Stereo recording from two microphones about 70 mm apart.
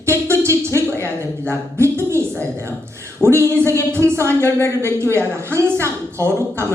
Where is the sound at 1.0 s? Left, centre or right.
Right.